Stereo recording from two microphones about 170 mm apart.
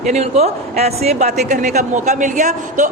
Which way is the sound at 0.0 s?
40° right (ahead or behind).